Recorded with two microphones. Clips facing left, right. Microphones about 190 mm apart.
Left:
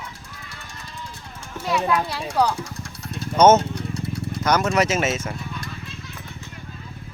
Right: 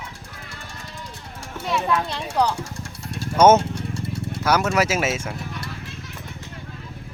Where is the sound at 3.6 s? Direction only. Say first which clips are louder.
Even; 25° right (ahead or behind).